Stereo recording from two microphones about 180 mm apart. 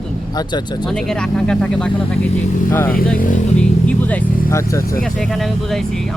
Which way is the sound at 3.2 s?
45° left (ahead or behind).